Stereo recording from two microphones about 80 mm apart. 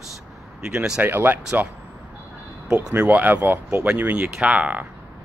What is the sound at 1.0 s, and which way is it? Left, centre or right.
Speech, right.